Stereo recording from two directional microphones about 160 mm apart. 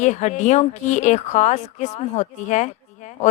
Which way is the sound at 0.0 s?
50° left (ahead or behind).